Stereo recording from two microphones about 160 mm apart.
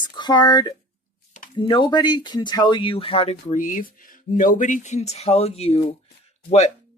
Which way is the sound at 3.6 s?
55° left (ahead or behind).